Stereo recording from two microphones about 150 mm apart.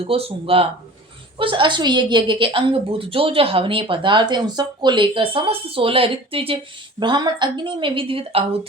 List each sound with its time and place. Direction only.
0.0 s a woman's voice: 40° right (ahead or behind)